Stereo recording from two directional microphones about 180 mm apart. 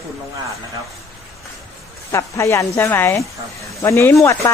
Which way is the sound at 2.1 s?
15° left (ahead or behind).